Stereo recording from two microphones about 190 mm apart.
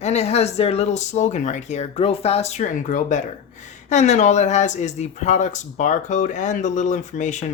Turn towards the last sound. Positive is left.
turn(degrees=40)  # may be behind; listen again after turning